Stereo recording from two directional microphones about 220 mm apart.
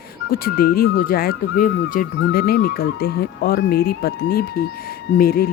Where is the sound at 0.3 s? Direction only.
45° left (ahead or behind).